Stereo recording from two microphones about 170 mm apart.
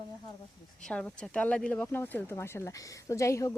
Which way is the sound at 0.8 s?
5° left (ahead or behind).